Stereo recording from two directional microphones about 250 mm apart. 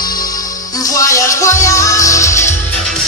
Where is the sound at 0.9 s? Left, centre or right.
Centre.